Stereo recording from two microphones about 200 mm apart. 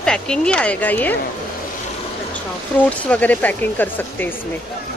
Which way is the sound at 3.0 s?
5° left (ahead or behind).